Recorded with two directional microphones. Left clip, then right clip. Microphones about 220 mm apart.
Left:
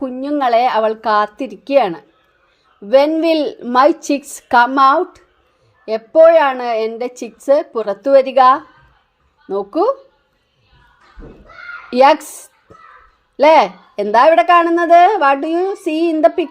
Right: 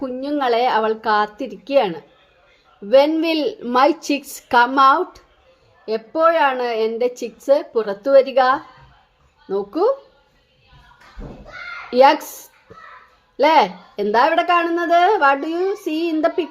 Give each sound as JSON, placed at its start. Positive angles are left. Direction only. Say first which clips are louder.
{"t": 0.0, "sound": "a woman's voice", "louder": "left 4 dB", "side_deg": 20}
{"t": 11.9, "sound": "speech", "louder": "left 2 dB", "side_deg": 25}